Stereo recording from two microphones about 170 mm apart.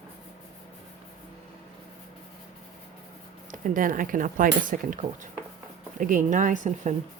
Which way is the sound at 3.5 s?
50° right (ahead or behind).